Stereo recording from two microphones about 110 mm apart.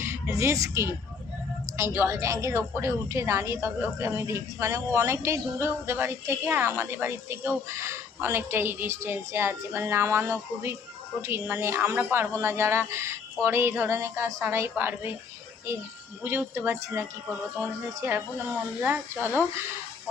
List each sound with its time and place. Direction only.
0.0 s a woman's voice: 25° right (ahead or behind)
16.2 s a woman's voice: 20° right (ahead or behind)